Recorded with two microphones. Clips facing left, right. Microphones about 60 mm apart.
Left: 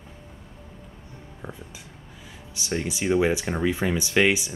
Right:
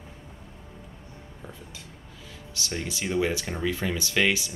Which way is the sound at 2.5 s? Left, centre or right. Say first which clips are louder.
Left 4 dB; centre.